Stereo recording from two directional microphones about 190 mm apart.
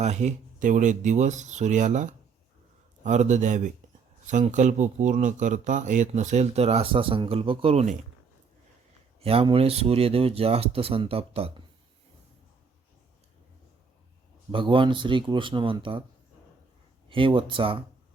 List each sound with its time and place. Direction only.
0.0 s speech: 35° right (ahead or behind)
9.2 s speech: 30° right (ahead or behind)
14.5 s speech: 25° right (ahead or behind)
17.1 s speech: 25° right (ahead or behind)